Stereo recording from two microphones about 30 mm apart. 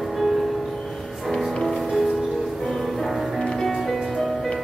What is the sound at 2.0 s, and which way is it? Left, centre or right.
Music, centre.